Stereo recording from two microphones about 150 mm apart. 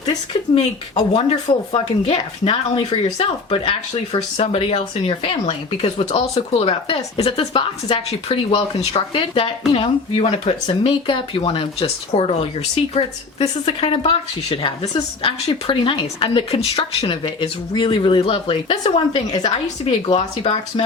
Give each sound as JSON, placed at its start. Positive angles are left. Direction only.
{"t": 0.5, "sound": "speech", "side_deg": 50}